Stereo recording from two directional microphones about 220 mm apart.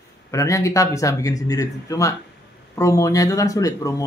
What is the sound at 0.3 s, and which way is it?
Speech, 15° left (ahead or behind).